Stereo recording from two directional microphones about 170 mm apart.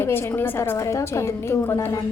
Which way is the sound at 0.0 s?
15° left (ahead or behind).